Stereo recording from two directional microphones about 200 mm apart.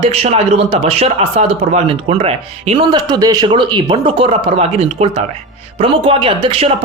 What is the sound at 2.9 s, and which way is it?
Speech, 20° right (ahead or behind).